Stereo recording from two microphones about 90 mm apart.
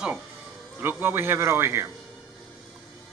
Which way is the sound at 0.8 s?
25° right (ahead or behind).